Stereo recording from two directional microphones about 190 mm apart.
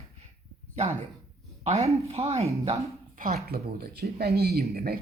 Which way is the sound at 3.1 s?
50° right (ahead or behind).